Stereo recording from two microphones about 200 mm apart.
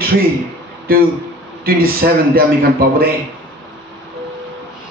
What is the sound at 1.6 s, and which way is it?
Speech, 50° right (ahead or behind).